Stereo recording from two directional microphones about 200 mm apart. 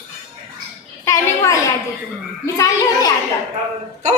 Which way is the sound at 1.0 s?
15° left (ahead or behind).